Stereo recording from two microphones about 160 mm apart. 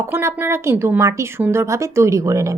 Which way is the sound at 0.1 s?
15° right (ahead or behind).